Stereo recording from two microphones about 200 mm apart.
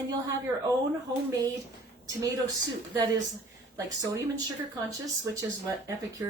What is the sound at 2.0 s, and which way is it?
Speech, 15° right (ahead or behind).